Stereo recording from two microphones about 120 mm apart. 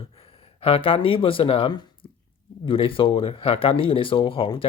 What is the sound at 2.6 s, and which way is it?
Speech, 45° left (ahead or behind).